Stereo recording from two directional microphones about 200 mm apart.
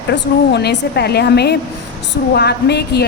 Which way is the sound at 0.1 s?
60° left (ahead or behind).